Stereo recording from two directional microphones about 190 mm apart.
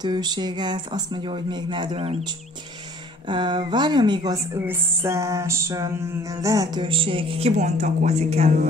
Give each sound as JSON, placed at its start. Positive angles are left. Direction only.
{"t": 0.0, "sound": "a woman's voice", "side_deg": -20}